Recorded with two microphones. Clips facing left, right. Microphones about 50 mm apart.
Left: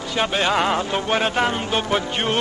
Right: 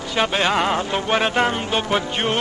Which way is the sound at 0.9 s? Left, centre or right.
Right.